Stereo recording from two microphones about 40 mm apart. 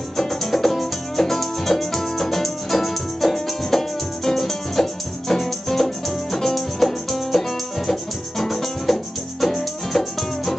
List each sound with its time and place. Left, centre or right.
0.2 s music: centre